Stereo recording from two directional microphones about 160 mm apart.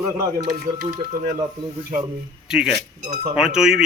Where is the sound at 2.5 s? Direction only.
5° right (ahead or behind).